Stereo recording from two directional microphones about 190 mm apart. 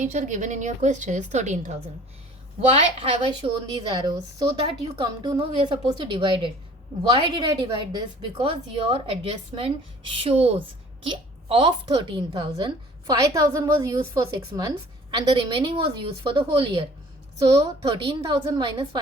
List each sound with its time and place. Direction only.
0.0 s a woman's voice: 40° right (ahead or behind)